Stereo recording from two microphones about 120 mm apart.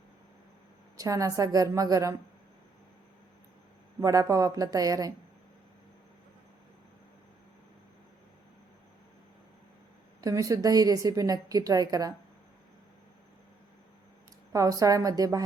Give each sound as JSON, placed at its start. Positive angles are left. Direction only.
{"t": 0.9, "sound": "a woman's voice", "side_deg": -30}
{"t": 4.0, "sound": "speech", "side_deg": -30}
{"t": 10.2, "sound": "a woman's voice", "side_deg": -30}
{"t": 14.5, "sound": "a woman's voice", "side_deg": -30}